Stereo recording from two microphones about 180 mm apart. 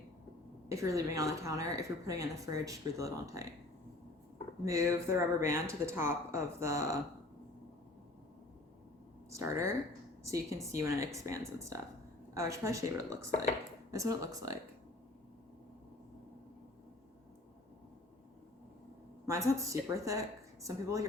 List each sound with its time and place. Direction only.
0.7 s a woman's voice: 15° right (ahead or behind)
4.6 s a woman's voice: 15° right (ahead or behind)
9.3 s a woman's voice: 15° right (ahead or behind)
19.2 s a woman's voice: 15° right (ahead or behind)